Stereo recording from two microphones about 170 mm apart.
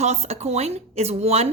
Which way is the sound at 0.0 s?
40° right (ahead or behind).